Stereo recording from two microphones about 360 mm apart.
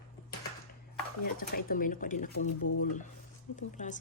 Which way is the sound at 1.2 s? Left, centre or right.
Left.